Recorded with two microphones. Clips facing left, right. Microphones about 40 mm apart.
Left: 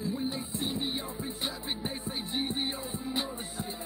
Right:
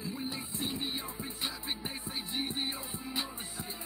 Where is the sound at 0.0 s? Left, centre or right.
Centre.